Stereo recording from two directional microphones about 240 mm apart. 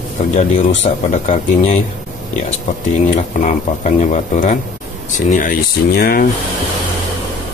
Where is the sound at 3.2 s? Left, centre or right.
Left.